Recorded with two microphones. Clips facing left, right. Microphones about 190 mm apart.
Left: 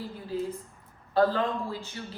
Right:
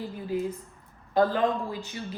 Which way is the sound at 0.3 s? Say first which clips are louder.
Right 2 dB; 15° right (ahead or behind).